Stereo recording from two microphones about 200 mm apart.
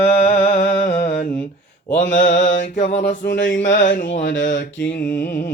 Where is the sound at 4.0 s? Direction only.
35° left (ahead or behind).